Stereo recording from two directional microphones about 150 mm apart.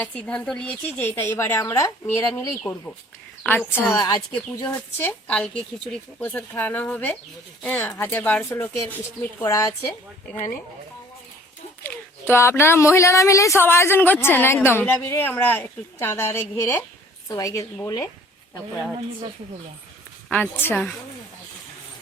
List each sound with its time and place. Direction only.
0.0 s speech: 10° left (ahead or behind)
11.8 s speech: 15° left (ahead or behind)
20.3 s speech: 10° left (ahead or behind)